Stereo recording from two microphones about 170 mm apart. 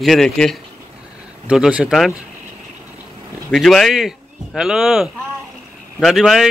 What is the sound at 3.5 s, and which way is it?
Speech, centre (ahead or behind).